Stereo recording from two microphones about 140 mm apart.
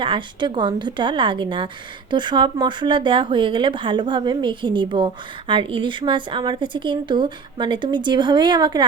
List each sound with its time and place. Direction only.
0.0 s a woman's voice: 35° right (ahead or behind)